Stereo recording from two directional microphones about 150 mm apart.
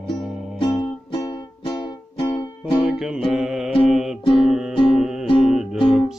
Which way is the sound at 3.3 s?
5° right (ahead or behind).